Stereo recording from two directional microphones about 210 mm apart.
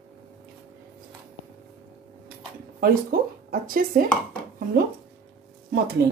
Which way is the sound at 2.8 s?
45° right (ahead or behind).